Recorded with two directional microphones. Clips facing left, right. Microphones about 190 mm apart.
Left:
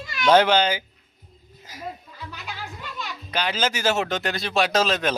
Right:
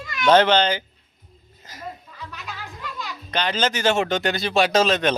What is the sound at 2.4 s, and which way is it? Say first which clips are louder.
Music: even; 25° left (ahead or behind).